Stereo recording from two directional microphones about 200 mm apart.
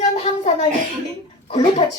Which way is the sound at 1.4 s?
25° left (ahead or behind).